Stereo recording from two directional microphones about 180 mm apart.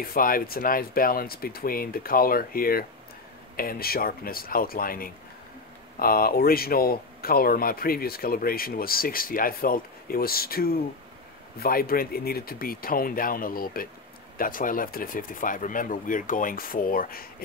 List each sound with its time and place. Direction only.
0.0 s speech: 55° left (ahead or behind)